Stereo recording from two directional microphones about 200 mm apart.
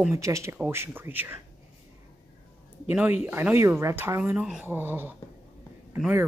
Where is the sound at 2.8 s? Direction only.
10° right (ahead or behind).